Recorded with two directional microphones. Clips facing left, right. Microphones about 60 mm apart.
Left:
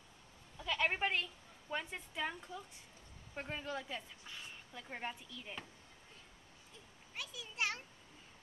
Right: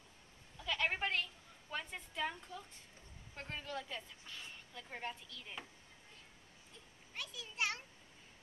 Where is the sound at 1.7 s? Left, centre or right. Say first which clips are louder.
Left 3 dB; centre.